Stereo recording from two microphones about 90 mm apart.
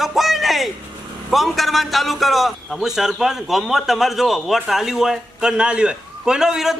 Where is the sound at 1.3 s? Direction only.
Centre (ahead or behind).